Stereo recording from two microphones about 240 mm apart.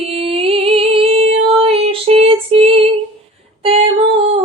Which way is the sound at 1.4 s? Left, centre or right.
Right.